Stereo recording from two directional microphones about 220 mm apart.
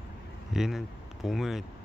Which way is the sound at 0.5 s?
Centre (ahead or behind).